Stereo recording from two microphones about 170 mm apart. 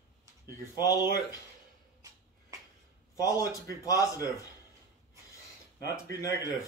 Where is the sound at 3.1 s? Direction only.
20° left (ahead or behind).